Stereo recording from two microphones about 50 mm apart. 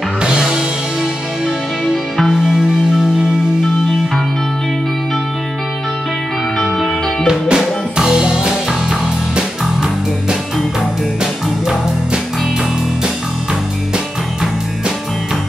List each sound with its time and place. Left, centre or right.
0.2 s music: centre
7.2 s music: centre
11.6 s music: centre